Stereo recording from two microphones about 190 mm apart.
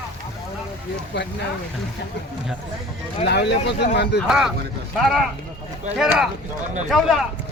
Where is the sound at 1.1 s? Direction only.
65° left (ahead or behind).